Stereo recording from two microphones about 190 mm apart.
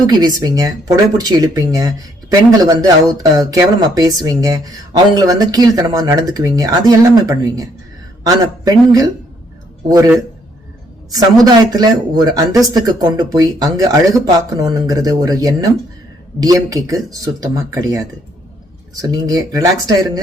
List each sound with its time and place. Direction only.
0.1 s speech: 20° right (ahead or behind)
11.1 s speech: 20° right (ahead or behind)